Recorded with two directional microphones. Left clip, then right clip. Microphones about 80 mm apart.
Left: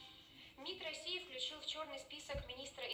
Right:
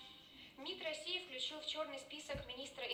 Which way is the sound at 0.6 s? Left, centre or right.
Left.